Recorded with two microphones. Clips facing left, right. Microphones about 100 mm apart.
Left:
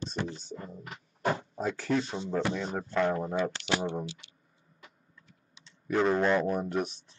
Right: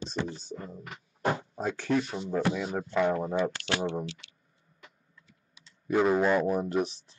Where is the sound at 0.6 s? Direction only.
Centre (ahead or behind).